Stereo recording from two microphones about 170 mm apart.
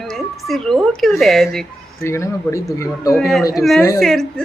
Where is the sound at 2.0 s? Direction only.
15° left (ahead or behind).